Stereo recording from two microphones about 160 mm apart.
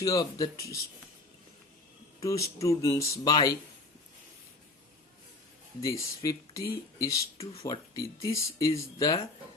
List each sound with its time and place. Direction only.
0.0 s speech: 20° left (ahead or behind)
2.2 s speech: 20° left (ahead or behind)
5.8 s speech: 20° left (ahead or behind)